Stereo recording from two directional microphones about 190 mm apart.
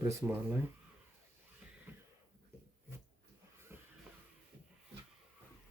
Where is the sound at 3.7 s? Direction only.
10° right (ahead or behind).